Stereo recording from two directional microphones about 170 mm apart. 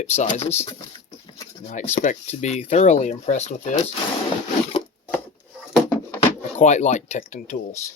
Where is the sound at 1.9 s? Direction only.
45° left (ahead or behind).